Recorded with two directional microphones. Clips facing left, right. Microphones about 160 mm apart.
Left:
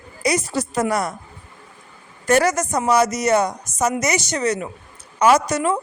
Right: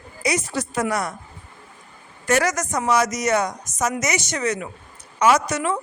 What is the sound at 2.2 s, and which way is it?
Speech, 30° left (ahead or behind).